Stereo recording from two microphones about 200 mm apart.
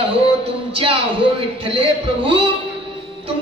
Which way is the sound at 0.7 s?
25° right (ahead or behind).